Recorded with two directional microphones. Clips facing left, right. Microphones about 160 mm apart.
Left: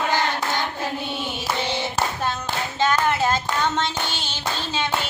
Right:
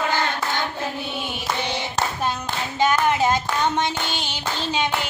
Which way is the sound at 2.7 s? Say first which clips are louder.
Right 2 dB; 15° right (ahead or behind).